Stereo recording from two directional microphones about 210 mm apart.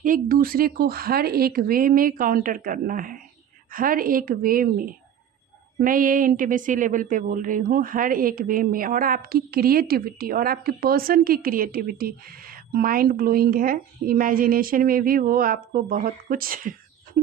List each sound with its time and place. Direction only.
0.0 s speech: 40° right (ahead or behind)
5.8 s speech: 40° right (ahead or behind)